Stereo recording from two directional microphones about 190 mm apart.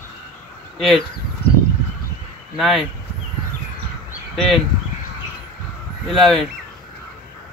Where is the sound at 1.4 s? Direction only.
60° left (ahead or behind).